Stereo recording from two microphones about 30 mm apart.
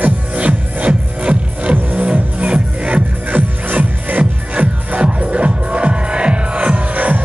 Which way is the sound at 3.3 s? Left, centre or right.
Right.